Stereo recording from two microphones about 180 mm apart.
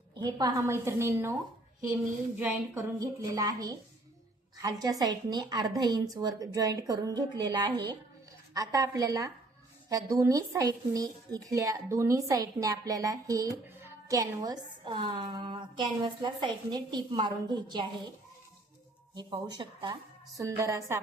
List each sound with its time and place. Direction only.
0.1 s a woman's voice: 20° right (ahead or behind)
2.4 s a woman's voice: 10° right (ahead or behind)
3.0 s a woman's voice: 20° right (ahead or behind)
19.1 s a woman's voice: 25° right (ahead or behind)